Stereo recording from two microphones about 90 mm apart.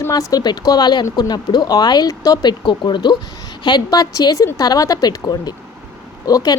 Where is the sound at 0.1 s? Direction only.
40° left (ahead or behind).